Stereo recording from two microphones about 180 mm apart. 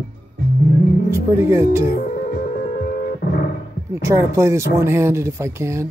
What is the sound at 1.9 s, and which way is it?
Music, 50° left (ahead or behind).